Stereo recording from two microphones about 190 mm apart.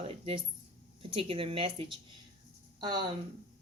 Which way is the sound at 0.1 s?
30° right (ahead or behind).